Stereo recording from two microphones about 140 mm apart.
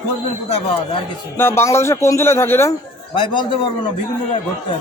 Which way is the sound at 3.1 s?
35° left (ahead or behind).